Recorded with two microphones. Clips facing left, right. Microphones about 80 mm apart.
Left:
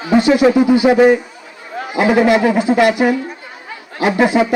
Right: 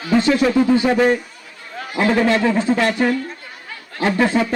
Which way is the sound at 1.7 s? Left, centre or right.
Centre.